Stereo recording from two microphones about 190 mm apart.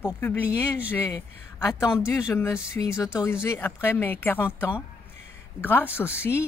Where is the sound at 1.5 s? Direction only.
15° left (ahead or behind).